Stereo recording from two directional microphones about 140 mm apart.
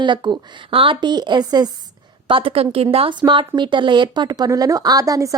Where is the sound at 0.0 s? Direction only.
35° right (ahead or behind).